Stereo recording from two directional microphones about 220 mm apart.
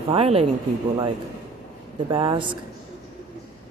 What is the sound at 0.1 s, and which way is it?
Speech, 25° right (ahead or behind).